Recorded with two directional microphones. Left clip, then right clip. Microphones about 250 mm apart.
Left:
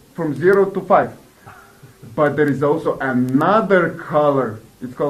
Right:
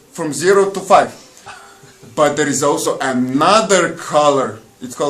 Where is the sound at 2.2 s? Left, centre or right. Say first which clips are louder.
Right 2 dB; centre.